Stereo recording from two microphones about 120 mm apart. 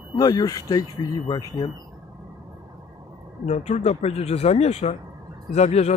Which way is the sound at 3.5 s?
65° left (ahead or behind).